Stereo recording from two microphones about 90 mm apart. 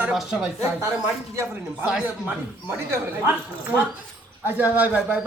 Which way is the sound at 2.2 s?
30° right (ahead or behind).